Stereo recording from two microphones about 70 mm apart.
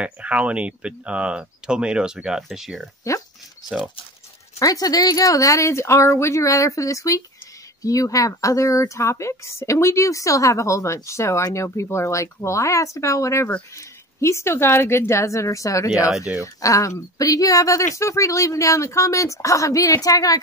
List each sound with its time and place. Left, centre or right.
0.0 s speech: centre
4.6 s speech: left